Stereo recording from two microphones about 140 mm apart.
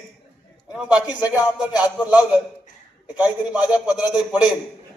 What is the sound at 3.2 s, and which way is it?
A man's voice, 10° right (ahead or behind).